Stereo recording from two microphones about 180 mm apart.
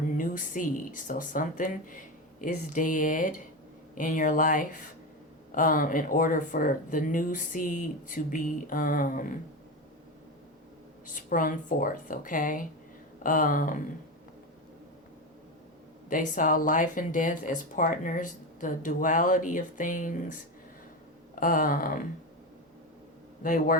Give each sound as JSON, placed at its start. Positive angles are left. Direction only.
{"t": 0.2, "sound": "speech", "side_deg": 50}
{"t": 11.0, "sound": "speech", "side_deg": 50}
{"t": 16.0, "sound": "speech", "side_deg": 50}
{"t": 23.4, "sound": "speech", "side_deg": 50}